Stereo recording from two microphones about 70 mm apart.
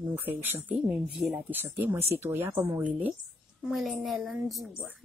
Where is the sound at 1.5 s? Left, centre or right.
Right.